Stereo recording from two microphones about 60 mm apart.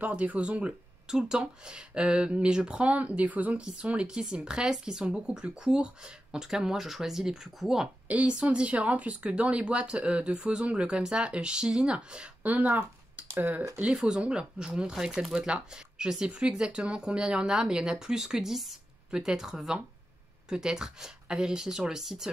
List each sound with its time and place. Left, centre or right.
0.0 s speech: right; by 7.9 s centre
8.1 s speech: centre
12.4 s speech: right
13.8 s speech: centre